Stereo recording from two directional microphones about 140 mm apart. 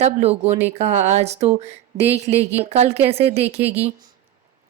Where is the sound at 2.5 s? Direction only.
50° right (ahead or behind).